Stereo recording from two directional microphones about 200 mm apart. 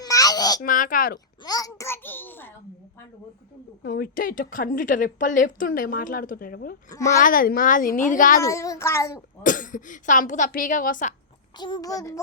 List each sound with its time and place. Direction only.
0.0 s babbling: 20° left (ahead or behind)
0.6 s speech: 40° left (ahead or behind)
1.5 s a sound: 20° left (ahead or behind)
3.8 s a woman's voice: 50° left (ahead or behind)
6.9 s a woman's voice: 15° left (ahead or behind)
7.2 s a woman's voice: 45° left (ahead or behind)
8.4 s a woman's voice: 15° left (ahead or behind)
9.4 s speech: 40° left (ahead or behind)
11.5 s a woman's voice: 20° left (ahead or behind)